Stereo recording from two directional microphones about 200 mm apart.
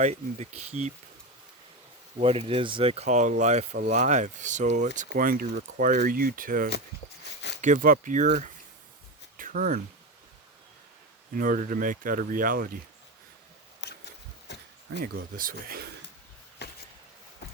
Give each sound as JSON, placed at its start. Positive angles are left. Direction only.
{"t": 0.0, "sound": "speech", "side_deg": -35}
{"t": 2.1, "sound": "speech", "side_deg": -30}
{"t": 11.3, "sound": "speech", "side_deg": -45}
{"t": 13.8, "sound": "a sound", "side_deg": 60}
{"t": 15.0, "sound": "speech", "side_deg": -45}
{"t": 16.6, "sound": "a sound", "side_deg": 55}